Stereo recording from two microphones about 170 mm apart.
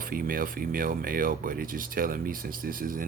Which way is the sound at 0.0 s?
55° right (ahead or behind).